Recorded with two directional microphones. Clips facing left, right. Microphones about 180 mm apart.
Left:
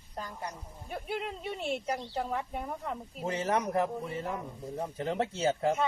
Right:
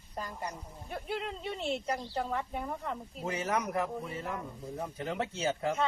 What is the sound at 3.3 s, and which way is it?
Speech, 30° left (ahead or behind).